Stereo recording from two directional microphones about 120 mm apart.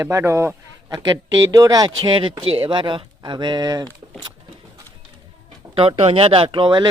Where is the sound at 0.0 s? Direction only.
20° right (ahead or behind).